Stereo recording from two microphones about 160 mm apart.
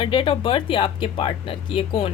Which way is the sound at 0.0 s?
30° left (ahead or behind).